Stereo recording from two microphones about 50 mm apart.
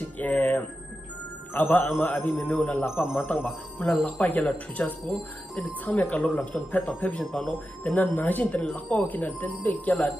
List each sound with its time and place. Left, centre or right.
0.2 s music: left
1.5 s speech: left
5.1 s speech: centre
5.9 s speech: left